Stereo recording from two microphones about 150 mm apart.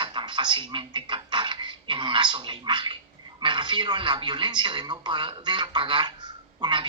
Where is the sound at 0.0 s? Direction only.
30° right (ahead or behind).